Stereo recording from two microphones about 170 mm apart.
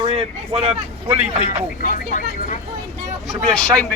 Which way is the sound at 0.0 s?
35° right (ahead or behind).